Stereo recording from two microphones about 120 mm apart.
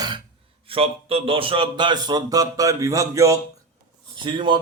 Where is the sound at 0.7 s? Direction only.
50° right (ahead or behind); by 3.4 s 25° right (ahead or behind).